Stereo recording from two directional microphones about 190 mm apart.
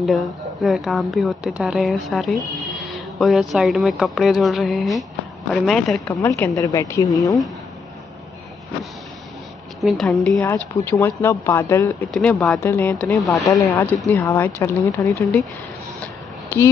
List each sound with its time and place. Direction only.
0.0 s speech: centre (ahead or behind)
6.2 s speech: 15° left (ahead or behind)
9.8 s speech: centre (ahead or behind)
10.4 s speech: 15° left (ahead or behind)
13.3 s speech: 15° left (ahead or behind)